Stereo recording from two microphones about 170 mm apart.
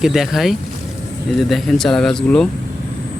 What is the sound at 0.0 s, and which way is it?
Speech, centre (ahead or behind).